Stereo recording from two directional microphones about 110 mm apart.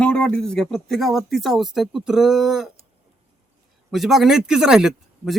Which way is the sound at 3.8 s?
Centre (ahead or behind).